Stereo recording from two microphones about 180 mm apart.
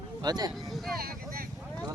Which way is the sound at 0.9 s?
55° right (ahead or behind).